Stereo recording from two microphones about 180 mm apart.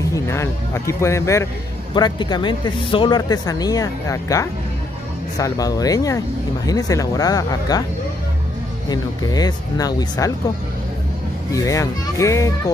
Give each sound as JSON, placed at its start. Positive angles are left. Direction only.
{"t": 0.1, "sound": "speech", "side_deg": 15}
{"t": 8.8, "sound": "speech", "side_deg": 20}
{"t": 11.5, "sound": "speech", "side_deg": 15}